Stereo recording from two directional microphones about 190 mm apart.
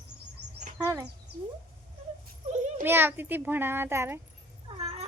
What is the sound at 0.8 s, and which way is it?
Speech, 10° right (ahead or behind).